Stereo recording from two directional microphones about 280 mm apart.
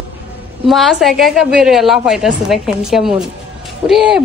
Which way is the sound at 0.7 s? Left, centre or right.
Centre.